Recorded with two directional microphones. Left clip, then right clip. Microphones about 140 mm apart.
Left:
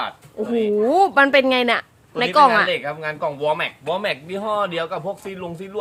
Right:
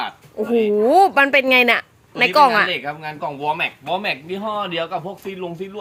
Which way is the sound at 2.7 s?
35° left (ahead or behind).